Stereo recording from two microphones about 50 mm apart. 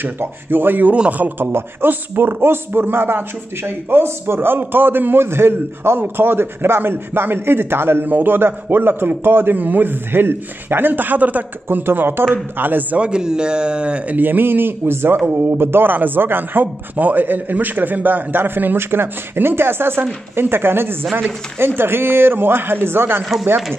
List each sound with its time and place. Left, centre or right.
0.0 s speech: right
0.9 s speech: right
1.4 s speech: right
11.8 s a man's voice: right
12.9 s speech: centre
14.1 s a man's voice: right